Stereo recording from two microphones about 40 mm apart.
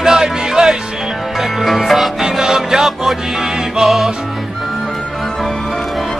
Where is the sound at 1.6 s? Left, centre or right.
Centre.